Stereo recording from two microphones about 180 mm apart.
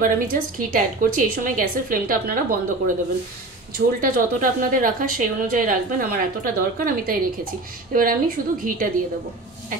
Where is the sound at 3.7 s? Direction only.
50° right (ahead or behind).